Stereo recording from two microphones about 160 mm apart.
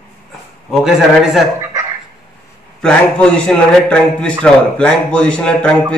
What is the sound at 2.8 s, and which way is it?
A man's voice, 5° left (ahead or behind).